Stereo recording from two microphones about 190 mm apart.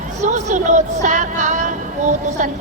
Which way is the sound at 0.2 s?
40° right (ahead or behind).